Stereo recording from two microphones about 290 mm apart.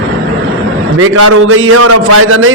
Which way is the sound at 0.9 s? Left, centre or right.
Right.